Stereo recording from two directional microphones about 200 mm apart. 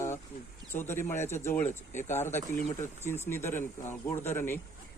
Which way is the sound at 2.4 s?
40° left (ahead or behind).